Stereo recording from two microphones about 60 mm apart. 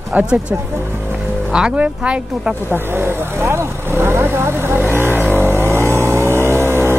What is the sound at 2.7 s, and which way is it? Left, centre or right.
Vehicle, right.